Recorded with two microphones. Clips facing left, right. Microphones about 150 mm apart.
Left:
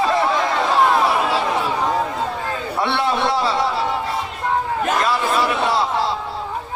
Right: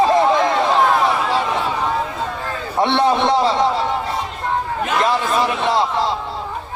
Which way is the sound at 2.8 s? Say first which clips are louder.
Right 5 dB; 20° right (ahead or behind).